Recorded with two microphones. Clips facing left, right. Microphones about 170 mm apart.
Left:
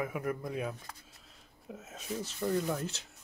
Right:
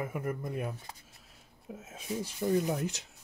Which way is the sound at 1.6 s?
5° right (ahead or behind).